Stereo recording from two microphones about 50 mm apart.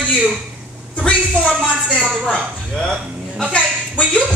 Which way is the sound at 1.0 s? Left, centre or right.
Left.